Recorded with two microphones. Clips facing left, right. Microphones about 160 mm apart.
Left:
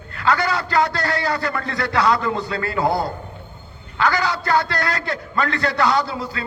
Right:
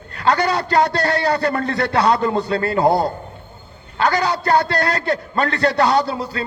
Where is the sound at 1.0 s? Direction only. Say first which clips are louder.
Right 4 dB; 35° right (ahead or behind).